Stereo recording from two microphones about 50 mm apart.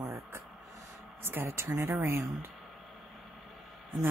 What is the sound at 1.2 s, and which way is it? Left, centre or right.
Speech, right.